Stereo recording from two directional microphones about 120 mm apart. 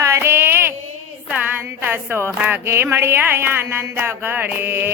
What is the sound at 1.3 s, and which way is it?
Music, 15° right (ahead or behind).